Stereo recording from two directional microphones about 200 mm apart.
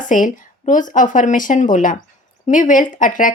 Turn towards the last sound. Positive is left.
turn(degrees=40)  # may be behind; listen again after turning